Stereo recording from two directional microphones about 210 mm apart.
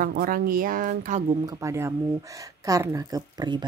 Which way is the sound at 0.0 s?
45° right (ahead or behind).